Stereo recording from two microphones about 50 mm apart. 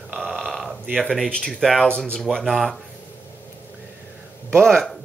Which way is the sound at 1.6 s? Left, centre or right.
Centre.